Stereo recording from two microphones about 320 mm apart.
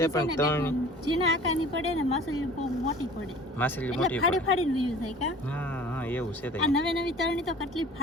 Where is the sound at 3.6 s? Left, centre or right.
Centre.